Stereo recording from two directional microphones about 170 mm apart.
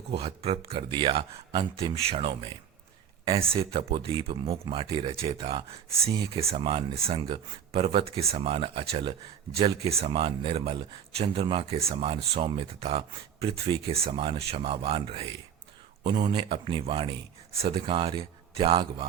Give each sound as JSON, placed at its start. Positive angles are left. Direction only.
{"t": 0.2, "sound": "speech", "side_deg": -35}